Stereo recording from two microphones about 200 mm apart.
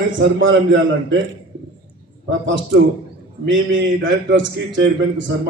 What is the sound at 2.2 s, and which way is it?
Speech, 70° right (ahead or behind).